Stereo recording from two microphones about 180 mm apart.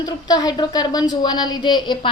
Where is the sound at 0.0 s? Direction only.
20° left (ahead or behind).